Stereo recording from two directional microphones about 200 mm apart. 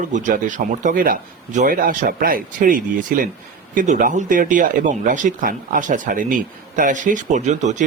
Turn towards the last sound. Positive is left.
turn(degrees=-35)  # may be behind; listen again after turning